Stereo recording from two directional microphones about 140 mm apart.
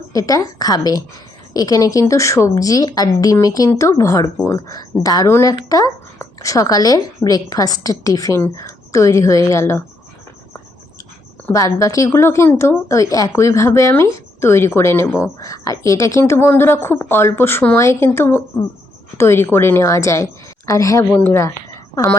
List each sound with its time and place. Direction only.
0.1 s speech: 25° left (ahead or behind)
11.5 s speech: 25° left (ahead or behind)